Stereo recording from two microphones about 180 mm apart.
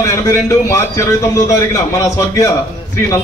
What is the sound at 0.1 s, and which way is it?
A man's voice, 15° left (ahead or behind).